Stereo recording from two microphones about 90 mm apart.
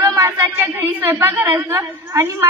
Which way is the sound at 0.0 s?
30° right (ahead or behind).